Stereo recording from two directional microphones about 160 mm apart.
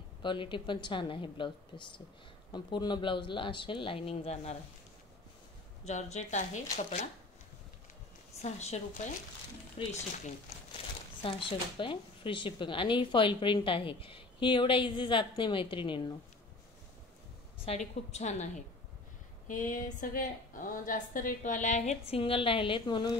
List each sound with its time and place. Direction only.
0.2 s speech: 30° left (ahead or behind)
5.9 s a woman's voice: 45° left (ahead or behind)
8.4 s a woman's voice: 45° left (ahead or behind)
11.2 s speech: 30° left (ahead or behind)
17.6 s a woman's voice: 45° left (ahead or behind); by 23.1 s 30° left (ahead or behind)